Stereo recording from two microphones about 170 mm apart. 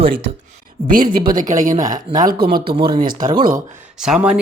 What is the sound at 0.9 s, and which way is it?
Speech, 55° right (ahead or behind).